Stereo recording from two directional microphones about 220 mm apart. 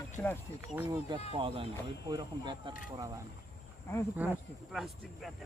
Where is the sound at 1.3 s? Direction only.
25° right (ahead or behind).